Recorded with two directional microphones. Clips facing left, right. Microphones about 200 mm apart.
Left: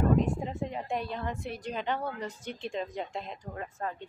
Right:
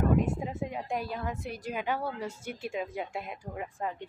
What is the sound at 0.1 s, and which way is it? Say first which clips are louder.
A woman's voice: left 1 dB; 5° right (ahead or behind).